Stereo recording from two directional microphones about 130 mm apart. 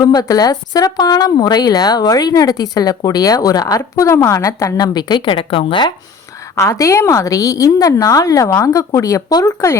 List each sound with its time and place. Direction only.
0.0 s speech: 30° left (ahead or behind)
6.6 s speech: 25° left (ahead or behind)